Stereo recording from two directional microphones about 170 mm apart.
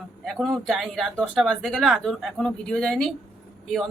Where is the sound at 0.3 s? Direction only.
Centre (ahead or behind).